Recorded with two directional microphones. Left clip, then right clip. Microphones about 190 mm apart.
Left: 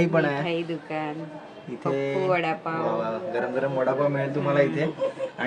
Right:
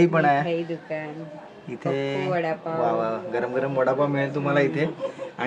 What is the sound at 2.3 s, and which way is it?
Speech, 40° left (ahead or behind).